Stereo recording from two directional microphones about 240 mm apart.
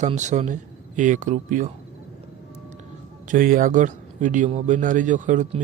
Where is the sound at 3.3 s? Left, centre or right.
Right.